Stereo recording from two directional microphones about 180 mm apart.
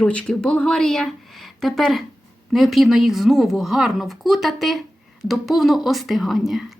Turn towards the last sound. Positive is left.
turn(degrees=0)  # may be behind; listen again after turning